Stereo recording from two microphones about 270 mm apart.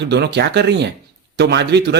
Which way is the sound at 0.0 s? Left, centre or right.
Right.